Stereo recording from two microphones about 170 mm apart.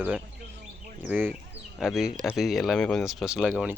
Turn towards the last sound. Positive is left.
turn(degrees=-5)  # may be behind; listen again after turning